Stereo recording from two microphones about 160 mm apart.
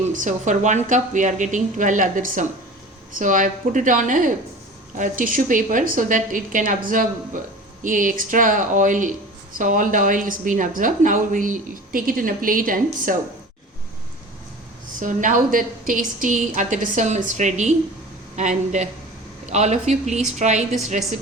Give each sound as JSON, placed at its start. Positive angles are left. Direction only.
{"t": 0.1, "sound": "a woman's voice", "side_deg": -50}
{"t": 14.9, "sound": "a woman's voice", "side_deg": -55}